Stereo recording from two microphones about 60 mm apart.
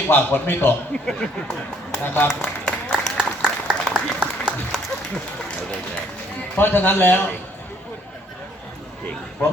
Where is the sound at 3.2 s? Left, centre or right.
Centre.